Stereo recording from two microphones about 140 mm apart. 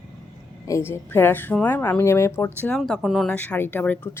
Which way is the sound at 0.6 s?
20° left (ahead or behind).